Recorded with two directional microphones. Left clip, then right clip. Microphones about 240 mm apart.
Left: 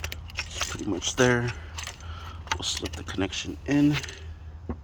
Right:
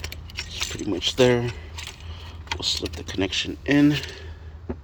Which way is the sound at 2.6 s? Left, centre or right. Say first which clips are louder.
Right 5 dB; centre.